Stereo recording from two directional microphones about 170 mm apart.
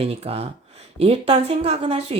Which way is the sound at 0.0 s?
35° right (ahead or behind).